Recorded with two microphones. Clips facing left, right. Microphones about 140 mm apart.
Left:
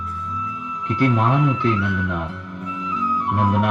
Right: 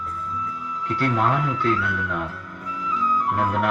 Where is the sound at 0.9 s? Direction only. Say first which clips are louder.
Left 4 dB; 20° left (ahead or behind).